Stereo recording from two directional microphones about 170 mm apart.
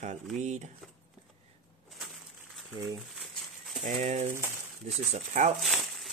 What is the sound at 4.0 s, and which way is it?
Speech, 40° right (ahead or behind).